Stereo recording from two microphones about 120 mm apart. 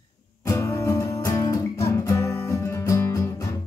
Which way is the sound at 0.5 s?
25° left (ahead or behind).